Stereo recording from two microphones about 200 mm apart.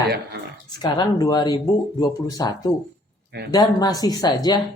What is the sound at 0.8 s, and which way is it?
Speech, 20° left (ahead or behind).